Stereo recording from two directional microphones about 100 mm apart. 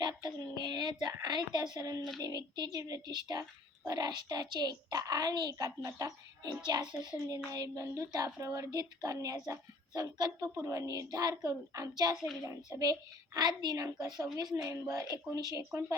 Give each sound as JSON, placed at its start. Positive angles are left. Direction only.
{"t": 0.2, "sound": "a woman's voice", "side_deg": -40}
{"t": 12.1, "sound": "speech", "side_deg": -5}
{"t": 12.5, "sound": "a woman's voice", "side_deg": -35}